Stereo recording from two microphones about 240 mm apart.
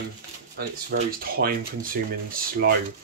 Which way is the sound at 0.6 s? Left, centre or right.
Right.